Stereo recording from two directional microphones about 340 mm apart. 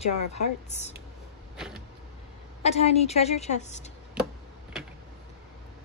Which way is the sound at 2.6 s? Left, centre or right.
Centre.